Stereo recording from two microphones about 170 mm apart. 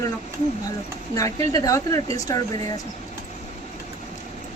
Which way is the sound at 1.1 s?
20° left (ahead or behind).